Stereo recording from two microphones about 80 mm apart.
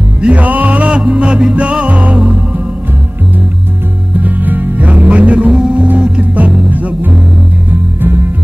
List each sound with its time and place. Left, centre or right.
0.2 s music: centre
4.2 s music: right